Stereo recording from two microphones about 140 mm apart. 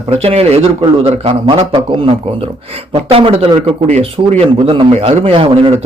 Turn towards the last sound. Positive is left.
turn(degrees=-45)  # may be behind; listen again after turning